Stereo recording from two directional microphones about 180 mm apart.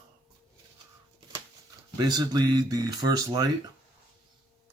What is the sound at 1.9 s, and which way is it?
Speech, 20° right (ahead or behind).